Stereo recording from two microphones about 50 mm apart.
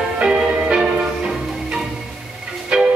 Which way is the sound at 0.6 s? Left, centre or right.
Right.